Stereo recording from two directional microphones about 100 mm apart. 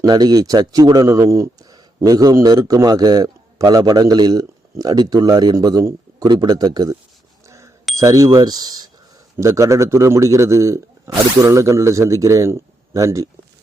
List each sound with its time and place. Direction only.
0.0 s speech: 40° right (ahead or behind)
7.4 s bicycle bell: 30° right (ahead or behind)
7.9 s speech: 35° right (ahead or behind)
9.4 s speech: 30° right (ahead or behind)